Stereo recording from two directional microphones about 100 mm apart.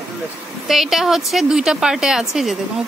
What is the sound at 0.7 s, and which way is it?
A woman's voice, 5° right (ahead or behind).